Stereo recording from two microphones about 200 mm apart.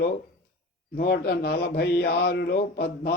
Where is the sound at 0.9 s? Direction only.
55° left (ahead or behind).